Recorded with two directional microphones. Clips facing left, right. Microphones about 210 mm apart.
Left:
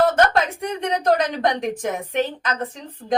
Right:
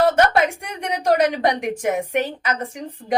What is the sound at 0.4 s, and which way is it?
A woman's voice, 10° right (ahead or behind).